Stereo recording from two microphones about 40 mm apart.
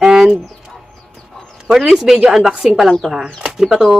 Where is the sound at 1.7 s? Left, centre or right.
Centre.